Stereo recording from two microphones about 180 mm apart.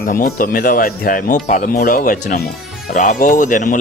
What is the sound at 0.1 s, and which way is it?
Speech, 50° left (ahead or behind).